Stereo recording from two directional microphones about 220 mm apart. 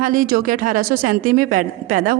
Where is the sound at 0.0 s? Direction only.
40° right (ahead or behind).